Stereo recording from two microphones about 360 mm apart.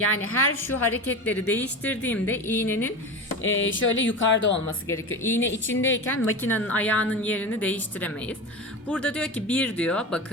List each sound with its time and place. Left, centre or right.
0.0 s speech: left
0.7 s a woman's voice: centre
3.4 s speech: left
6.4 s a woman's voice: centre